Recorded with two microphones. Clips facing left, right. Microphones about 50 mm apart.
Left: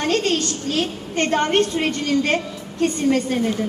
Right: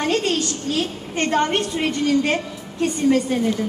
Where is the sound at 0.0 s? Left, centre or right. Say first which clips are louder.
Even; centre.